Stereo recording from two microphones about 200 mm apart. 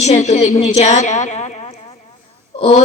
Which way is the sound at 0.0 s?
35° left (ahead or behind).